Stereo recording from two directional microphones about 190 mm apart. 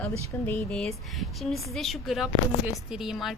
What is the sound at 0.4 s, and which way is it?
Speech, 5° left (ahead or behind).